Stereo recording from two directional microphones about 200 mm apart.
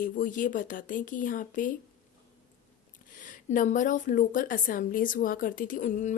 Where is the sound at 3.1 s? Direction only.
40° left (ahead or behind).